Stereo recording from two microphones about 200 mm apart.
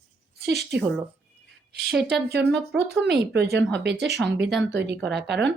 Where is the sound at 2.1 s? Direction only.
55° right (ahead or behind).